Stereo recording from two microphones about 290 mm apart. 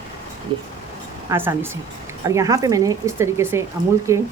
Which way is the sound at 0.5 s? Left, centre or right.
Centre.